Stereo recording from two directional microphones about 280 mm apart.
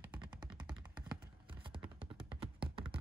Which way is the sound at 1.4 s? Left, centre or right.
Centre.